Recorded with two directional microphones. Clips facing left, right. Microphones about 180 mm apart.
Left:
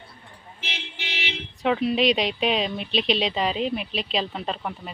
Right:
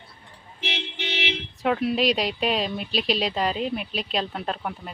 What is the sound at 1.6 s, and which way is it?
Speech, 5° right (ahead or behind).